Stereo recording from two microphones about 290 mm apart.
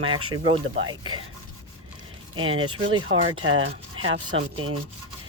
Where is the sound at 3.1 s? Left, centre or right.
Right.